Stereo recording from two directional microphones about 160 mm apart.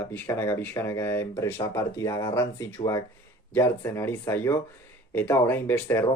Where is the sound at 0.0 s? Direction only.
15° left (ahead or behind).